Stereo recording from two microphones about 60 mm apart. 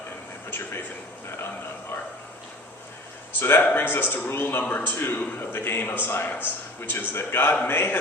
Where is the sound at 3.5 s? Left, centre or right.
Left.